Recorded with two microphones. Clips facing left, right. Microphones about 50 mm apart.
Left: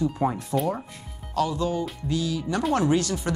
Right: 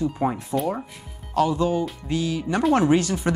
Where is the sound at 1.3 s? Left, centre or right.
Centre.